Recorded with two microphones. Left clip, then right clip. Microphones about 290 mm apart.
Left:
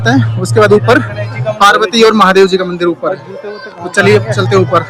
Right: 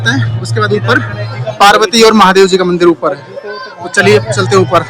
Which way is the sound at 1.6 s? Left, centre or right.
Centre.